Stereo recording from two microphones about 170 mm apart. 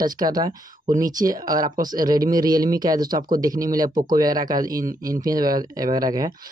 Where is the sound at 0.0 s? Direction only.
25° right (ahead or behind).